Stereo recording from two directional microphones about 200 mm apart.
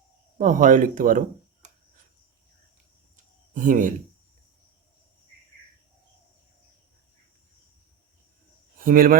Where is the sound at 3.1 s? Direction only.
40° right (ahead or behind).